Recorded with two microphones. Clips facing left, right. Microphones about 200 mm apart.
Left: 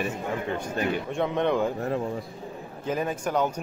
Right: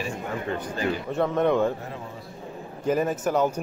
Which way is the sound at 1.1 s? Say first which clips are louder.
Right 5 dB; centre (ahead or behind).